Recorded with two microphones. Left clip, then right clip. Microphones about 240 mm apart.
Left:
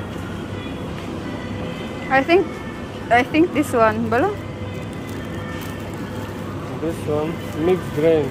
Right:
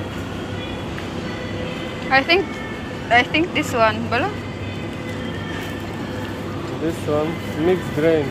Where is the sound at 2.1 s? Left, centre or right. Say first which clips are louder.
Even; centre.